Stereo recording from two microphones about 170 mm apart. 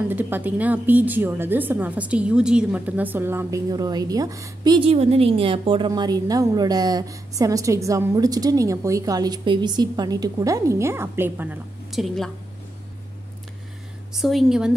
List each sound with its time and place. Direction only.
0.1 s a woman's voice: 10° right (ahead or behind)
4.7 s a woman's voice: 35° right (ahead or behind); by 12.3 s centre (ahead or behind)
14.1 s a woman's voice: centre (ahead or behind)